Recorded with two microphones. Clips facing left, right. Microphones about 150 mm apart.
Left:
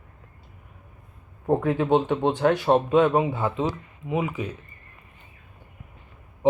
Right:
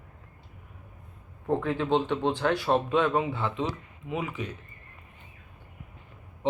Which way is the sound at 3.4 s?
40° left (ahead or behind).